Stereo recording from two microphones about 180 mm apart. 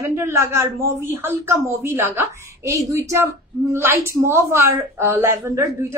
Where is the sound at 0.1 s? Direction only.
15° right (ahead or behind).